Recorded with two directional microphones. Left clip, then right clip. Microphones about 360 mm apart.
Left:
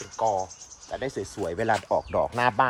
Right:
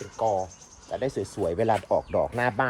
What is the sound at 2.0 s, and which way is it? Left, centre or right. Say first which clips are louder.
Speech: left 1 dB; left.